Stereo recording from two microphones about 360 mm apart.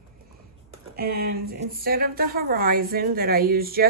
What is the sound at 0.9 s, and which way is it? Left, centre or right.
A woman's voice, right.